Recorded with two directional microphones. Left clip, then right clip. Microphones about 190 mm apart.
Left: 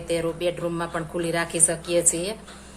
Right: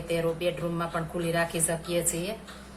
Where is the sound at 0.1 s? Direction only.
30° left (ahead or behind).